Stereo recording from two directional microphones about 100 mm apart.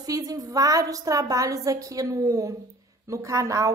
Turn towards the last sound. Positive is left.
turn(degrees=-30)  # may be behind; listen again after turning